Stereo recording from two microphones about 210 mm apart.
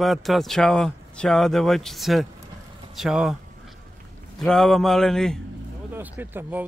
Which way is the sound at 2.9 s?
Centre (ahead or behind).